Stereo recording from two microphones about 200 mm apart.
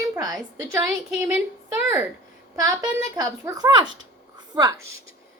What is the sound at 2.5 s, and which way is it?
A woman's voice, 15° right (ahead or behind).